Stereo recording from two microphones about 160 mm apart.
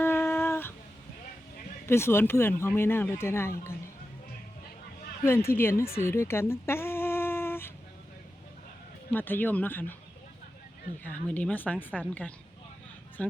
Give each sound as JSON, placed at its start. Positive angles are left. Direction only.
{"t": 0.0, "sound": "a sound", "side_deg": 15}
{"t": 1.9, "sound": "speech", "side_deg": 15}
{"t": 5.2, "sound": "speech", "side_deg": 15}
{"t": 6.0, "sound": "a sound", "side_deg": 15}
{"t": 9.1, "sound": "speech", "side_deg": 10}
{"t": 11.0, "sound": "speech", "side_deg": 10}